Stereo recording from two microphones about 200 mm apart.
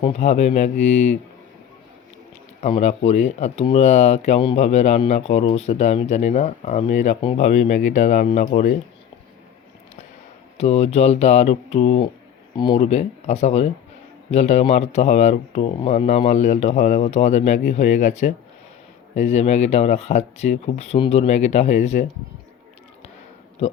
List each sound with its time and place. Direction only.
0.0 s speech: 35° left (ahead or behind)
2.6 s speech: 30° left (ahead or behind)
10.6 s speech: 30° left (ahead or behind)
23.6 s speech: 35° left (ahead or behind)